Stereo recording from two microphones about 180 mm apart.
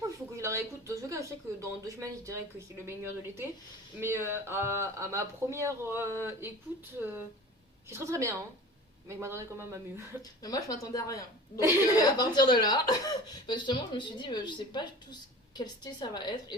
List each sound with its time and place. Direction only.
0.3 s speech: 15° right (ahead or behind)
10.4 s a woman's voice: 20° left (ahead or behind)